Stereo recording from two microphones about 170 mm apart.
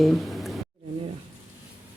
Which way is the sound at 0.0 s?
Centre (ahead or behind).